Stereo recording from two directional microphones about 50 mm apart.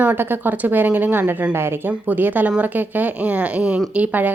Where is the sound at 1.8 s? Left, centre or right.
Right.